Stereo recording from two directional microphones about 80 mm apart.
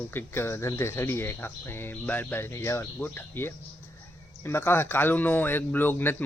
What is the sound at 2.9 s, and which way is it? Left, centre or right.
Speech, left.